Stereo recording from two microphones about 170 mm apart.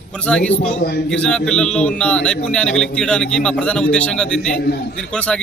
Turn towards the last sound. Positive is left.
turn(degrees=5)  # may be behind; listen again after turning